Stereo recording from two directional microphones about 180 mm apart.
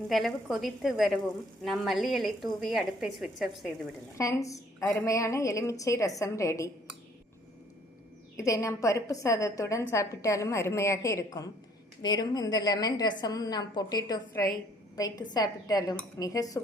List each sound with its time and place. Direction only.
0.1 s a woman's voice: centre (ahead or behind)
4.2 s a woman's voice: 20° left (ahead or behind)
8.4 s a woman's voice: 15° left (ahead or behind)